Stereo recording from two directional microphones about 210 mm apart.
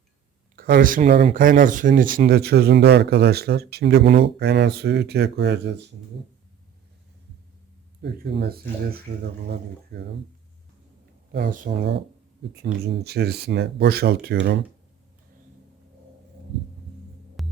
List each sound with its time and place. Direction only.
0.5 s speech: 45° right (ahead or behind)
8.0 s speech: 55° right (ahead or behind)
11.3 s speech: 45° right (ahead or behind)
17.4 s music: centre (ahead or behind)